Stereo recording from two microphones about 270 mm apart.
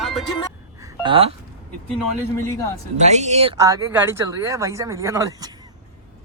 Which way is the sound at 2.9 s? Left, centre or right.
Right.